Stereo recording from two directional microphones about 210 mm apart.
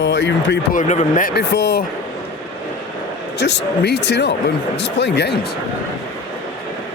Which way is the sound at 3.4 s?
55° left (ahead or behind).